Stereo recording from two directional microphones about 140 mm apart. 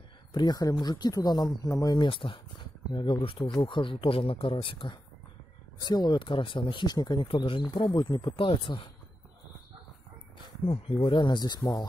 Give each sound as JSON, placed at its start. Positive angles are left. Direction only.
{"t": 0.3, "sound": "speech", "side_deg": 30}
{"t": 10.6, "sound": "speech", "side_deg": 40}